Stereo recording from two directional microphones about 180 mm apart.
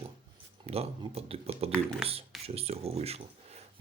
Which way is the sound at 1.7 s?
5° left (ahead or behind).